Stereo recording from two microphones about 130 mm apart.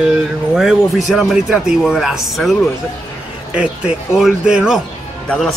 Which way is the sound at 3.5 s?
10° right (ahead or behind).